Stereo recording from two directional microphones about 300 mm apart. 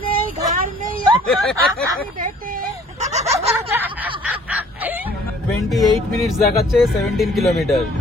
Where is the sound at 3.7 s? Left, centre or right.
Centre.